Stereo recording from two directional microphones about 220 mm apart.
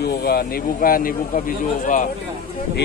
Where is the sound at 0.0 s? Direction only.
45° left (ahead or behind).